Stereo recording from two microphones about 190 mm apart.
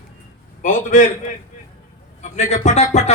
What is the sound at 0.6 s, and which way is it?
Speech, 40° left (ahead or behind).